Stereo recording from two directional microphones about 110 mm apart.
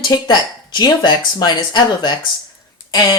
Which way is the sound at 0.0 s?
40° left (ahead or behind).